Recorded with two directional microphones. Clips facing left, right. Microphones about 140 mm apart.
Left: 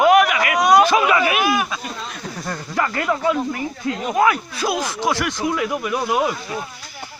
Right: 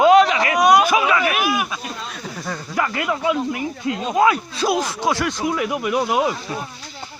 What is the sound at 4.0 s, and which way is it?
Speech, 20° right (ahead or behind).